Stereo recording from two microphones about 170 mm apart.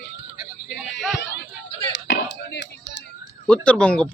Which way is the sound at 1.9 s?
85° left.